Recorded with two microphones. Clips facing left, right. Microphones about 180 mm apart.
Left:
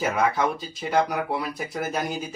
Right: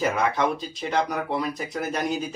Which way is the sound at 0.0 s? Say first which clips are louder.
Even; 5° left (ahead or behind).